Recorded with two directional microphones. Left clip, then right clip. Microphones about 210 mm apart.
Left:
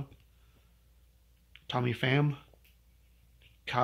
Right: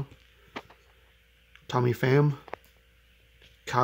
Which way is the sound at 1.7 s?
65° right (ahead or behind).